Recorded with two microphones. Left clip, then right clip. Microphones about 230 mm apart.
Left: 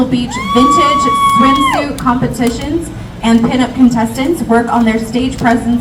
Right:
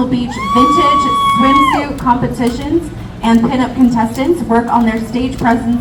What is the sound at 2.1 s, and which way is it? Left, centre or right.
Speech, left.